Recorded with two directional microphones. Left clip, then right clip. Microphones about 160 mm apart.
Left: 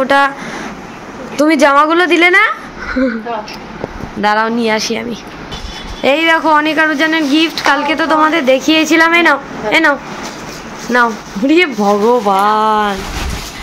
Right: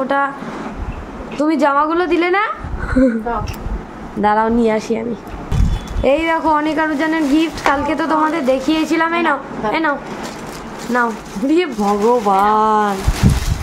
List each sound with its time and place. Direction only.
0.0 s speech: 15° left (ahead or behind)
1.3 s a woman's voice: 5° left (ahead or behind)
2.9 s speech: 25° right (ahead or behind)
4.2 s a woman's voice: 25° right (ahead or behind)
6.0 s a woman's voice: 5° left (ahead or behind)
8.2 s speech: 10° left (ahead or behind)
12.4 s speech: 10° right (ahead or behind)